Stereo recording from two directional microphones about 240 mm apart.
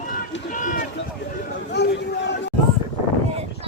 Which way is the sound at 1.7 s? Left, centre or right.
Left.